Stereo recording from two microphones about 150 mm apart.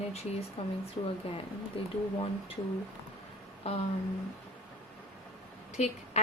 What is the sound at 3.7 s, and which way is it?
Speech, 40° left (ahead or behind).